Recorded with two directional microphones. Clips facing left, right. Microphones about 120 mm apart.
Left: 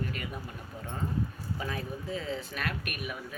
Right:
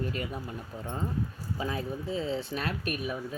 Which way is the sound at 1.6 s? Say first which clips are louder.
Right 4 dB; 25° right (ahead or behind).